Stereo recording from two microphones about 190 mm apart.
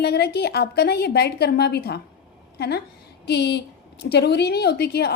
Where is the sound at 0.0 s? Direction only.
60° left (ahead or behind).